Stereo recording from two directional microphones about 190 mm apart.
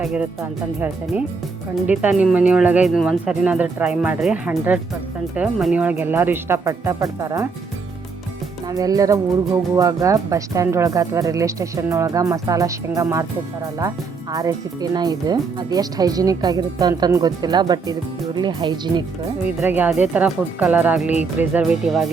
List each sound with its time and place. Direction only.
0.0 s speech: 5° right (ahead or behind)
1.9 s speech: 5° right (ahead or behind)
8.6 s speech: 20° right (ahead or behind)
19.6 s speech: 10° right (ahead or behind)